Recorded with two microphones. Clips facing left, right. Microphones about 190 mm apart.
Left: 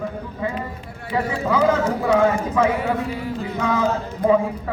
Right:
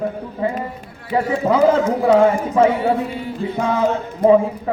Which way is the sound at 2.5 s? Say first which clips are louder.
Right 4 dB; 30° right (ahead or behind).